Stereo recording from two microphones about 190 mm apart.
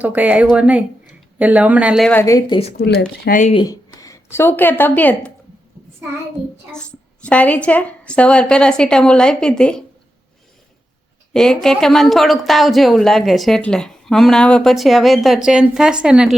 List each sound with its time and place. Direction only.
0.0 s speech: 10° right (ahead or behind)
2.0 s a woman's voice: 10° left (ahead or behind)
2.6 s speech: 30° left (ahead or behind)
3.0 s speech: 45° left (ahead or behind)
3.5 s speech: 20° left (ahead or behind)
7.3 s a woman's voice: 5° left (ahead or behind)
11.3 s a woman's voice: 5° left (ahead or behind)